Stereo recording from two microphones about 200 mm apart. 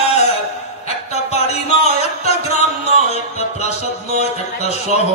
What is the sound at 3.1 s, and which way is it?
Music, 35° left (ahead or behind).